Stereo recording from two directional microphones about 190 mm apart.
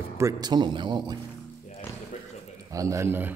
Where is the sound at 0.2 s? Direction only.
20° right (ahead or behind).